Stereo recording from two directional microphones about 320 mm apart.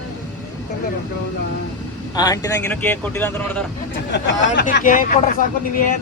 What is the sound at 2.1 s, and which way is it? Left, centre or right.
Speech, centre.